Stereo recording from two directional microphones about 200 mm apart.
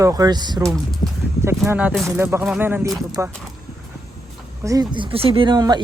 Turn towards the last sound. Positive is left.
turn(degrees=-20)  # may be behind; listen again after turning